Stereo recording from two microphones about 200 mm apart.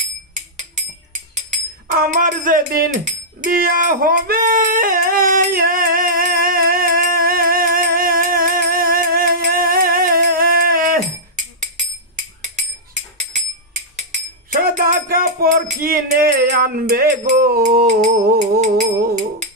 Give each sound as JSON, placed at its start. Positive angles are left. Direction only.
{"t": 0.3, "sound": "music", "side_deg": -40}
{"t": 13.9, "sound": "a sound", "side_deg": -40}
{"t": 15.8, "sound": "music", "side_deg": -45}